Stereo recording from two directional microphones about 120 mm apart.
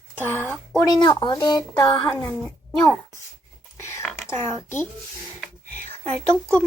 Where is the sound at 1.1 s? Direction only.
35° left (ahead or behind).